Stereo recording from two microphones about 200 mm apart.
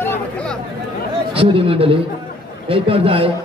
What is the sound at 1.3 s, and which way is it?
A man's voice, 30° right (ahead or behind).